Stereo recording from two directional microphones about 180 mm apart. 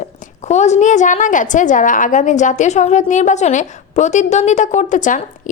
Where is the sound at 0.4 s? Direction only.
40° left (ahead or behind).